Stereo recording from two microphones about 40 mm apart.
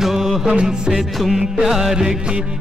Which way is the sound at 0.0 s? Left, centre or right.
Centre.